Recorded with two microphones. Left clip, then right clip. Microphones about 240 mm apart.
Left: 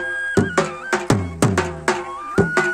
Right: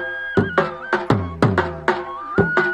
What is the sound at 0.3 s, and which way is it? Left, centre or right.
Music, left.